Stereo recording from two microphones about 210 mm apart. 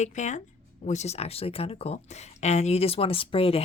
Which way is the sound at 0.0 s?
35° left (ahead or behind).